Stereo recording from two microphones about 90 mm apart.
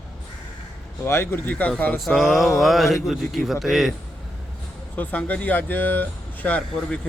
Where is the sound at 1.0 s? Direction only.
25° left (ahead or behind).